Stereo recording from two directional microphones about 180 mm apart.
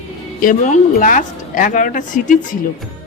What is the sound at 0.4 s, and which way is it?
Speech, 45° left (ahead or behind).